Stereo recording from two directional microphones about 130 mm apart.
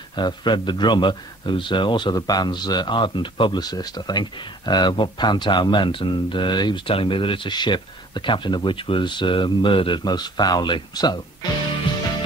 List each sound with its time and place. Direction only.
0.1 s a man's voice: 35° left (ahead or behind)